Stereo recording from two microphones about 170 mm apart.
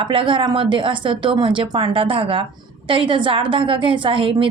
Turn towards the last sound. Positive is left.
turn(degrees=-30)  # may be behind; listen again after turning